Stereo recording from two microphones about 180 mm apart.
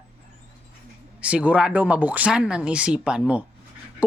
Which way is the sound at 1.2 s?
5° right (ahead or behind).